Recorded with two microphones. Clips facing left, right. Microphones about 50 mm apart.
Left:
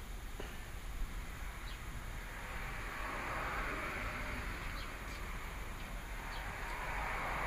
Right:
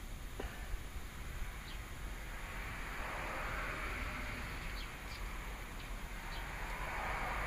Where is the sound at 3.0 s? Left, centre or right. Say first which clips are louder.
Left 2 dB; left.